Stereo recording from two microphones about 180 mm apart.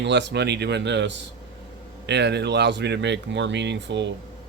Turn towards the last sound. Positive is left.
turn(degrees=-75)  # may be behind; listen again after turning